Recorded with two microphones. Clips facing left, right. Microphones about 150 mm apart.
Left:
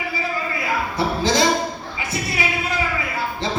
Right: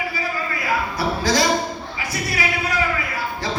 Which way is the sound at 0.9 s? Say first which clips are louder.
Left 2 dB; 25° left (ahead or behind).